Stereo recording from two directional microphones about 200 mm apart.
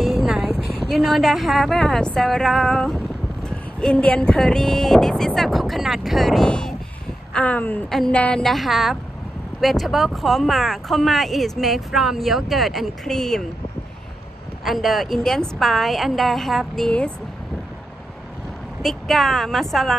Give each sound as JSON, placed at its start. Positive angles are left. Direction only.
{"t": 0.0, "sound": "a woman's voice", "side_deg": 0}
{"t": 14.6, "sound": "speech", "side_deg": 0}
{"t": 18.8, "sound": "speech", "side_deg": 0}